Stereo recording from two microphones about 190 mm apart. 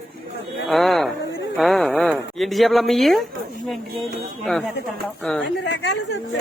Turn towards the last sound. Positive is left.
turn(degrees=65)  # may be behind; listen again after turning